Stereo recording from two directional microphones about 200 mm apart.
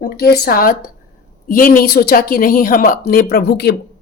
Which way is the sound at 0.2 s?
50° left (ahead or behind).